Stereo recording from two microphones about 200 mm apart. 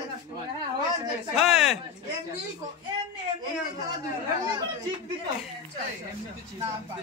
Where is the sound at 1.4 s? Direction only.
5° right (ahead or behind).